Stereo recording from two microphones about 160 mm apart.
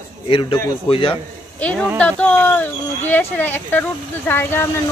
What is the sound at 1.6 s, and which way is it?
Speech, 10° left (ahead or behind).